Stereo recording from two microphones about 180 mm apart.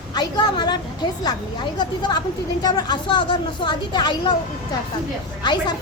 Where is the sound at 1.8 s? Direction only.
25° left (ahead or behind).